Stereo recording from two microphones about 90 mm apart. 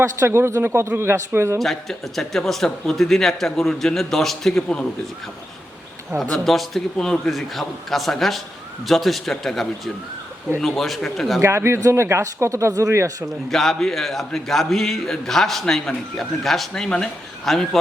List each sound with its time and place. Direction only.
0.0 s a man's voice: 30° right (ahead or behind)
1.5 s a man's voice: 5° left (ahead or behind)
6.1 s a man's voice: centre (ahead or behind)
11.4 s speech: 30° right (ahead or behind)
13.5 s a man's voice: 5° left (ahead or behind)